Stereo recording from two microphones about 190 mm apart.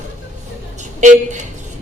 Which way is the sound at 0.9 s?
40° right (ahead or behind).